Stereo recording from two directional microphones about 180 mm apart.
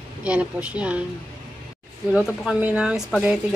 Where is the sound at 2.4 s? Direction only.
5° right (ahead or behind).